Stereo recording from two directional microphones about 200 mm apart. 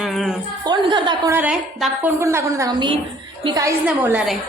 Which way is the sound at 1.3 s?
5° right (ahead or behind).